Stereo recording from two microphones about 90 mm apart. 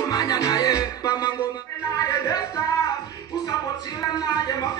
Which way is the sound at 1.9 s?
40° left (ahead or behind).